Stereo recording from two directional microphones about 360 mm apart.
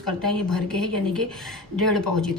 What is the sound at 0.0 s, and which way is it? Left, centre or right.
A woman's voice, centre.